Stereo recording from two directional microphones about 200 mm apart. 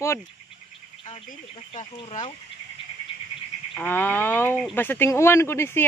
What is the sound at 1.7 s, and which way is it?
Speech, 35° left (ahead or behind).